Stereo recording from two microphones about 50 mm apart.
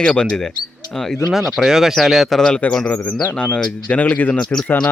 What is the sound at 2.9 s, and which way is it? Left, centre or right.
Speech, left.